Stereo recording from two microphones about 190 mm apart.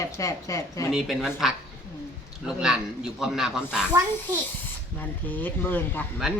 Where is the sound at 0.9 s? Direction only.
Centre (ahead or behind).